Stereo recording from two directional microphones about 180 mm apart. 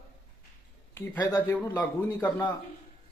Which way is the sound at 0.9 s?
20° left (ahead or behind).